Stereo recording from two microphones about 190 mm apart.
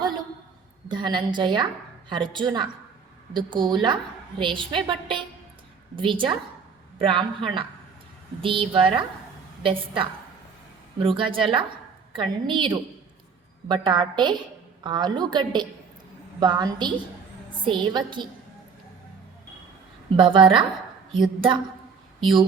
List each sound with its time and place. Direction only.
0.9 s a woman's voice: 25° right (ahead or behind)
20.1 s a woman's voice: 25° right (ahead or behind)